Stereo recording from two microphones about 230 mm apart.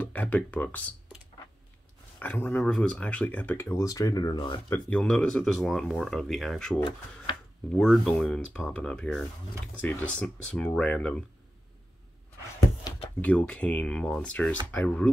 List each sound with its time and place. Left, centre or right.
0.0 s speech: centre
2.1 s speech: centre
4.7 s speech: centre
7.3 s a sound: left
7.7 s speech: centre
13.2 s speech: centre